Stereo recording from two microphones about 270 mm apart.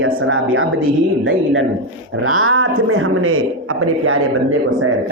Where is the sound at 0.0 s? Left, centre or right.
Right.